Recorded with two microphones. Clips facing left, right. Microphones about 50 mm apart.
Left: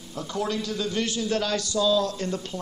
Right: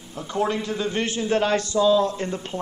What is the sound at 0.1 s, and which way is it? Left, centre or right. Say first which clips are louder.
A man's voice: right 4 dB; right.